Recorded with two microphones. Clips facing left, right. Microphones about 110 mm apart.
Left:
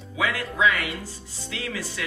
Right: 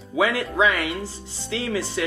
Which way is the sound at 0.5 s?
30° right (ahead or behind).